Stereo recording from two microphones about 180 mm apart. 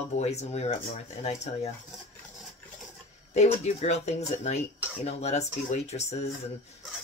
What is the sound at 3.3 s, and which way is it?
Speech, 40° left (ahead or behind).